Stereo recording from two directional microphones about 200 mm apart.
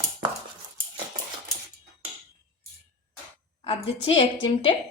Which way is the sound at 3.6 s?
25° left (ahead or behind).